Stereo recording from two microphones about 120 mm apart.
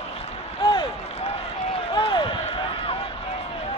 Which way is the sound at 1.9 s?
45° left (ahead or behind).